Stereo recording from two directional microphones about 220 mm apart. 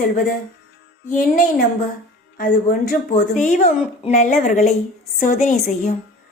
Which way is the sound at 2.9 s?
35° left (ahead or behind).